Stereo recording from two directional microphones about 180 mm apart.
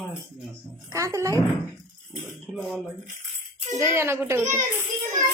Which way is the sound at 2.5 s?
Centre (ahead or behind).